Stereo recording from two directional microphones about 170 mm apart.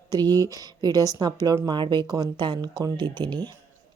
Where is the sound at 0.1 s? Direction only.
25° right (ahead or behind).